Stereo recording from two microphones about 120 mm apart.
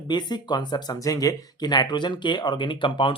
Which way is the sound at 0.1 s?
35° left (ahead or behind).